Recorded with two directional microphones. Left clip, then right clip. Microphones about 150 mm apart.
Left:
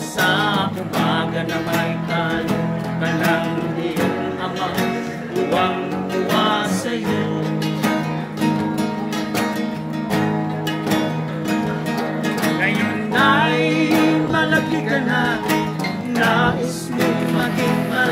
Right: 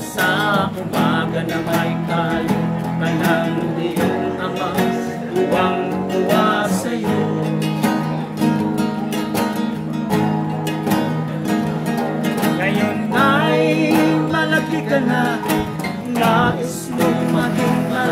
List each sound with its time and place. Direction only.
0.2 s music: 20° left (ahead or behind)
12.6 s music: 20° left (ahead or behind)